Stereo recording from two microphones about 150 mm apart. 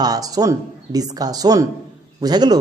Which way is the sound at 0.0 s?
25° right (ahead or behind).